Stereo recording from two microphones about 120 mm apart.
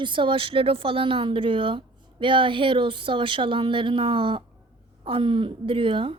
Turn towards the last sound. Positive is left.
turn(degrees=-45)  # may be behind; listen again after turning